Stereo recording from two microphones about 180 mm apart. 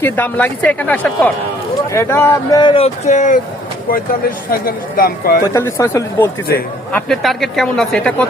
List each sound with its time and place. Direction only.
0.0 s a woman's voice: 10° left (ahead or behind); by 3.4 s 45° left (ahead or behind)
4.5 s speech: 55° left (ahead or behind)
5.5 s a woman's voice: 15° left (ahead or behind)
6.9 s speech: centre (ahead or behind)